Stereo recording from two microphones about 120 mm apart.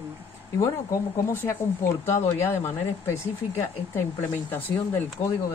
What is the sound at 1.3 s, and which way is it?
Speech, 20° left (ahead or behind).